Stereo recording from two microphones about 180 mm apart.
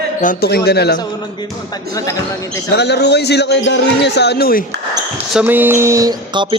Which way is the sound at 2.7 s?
65° left (ahead or behind).